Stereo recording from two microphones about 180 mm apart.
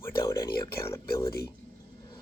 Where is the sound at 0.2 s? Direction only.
20° left (ahead or behind).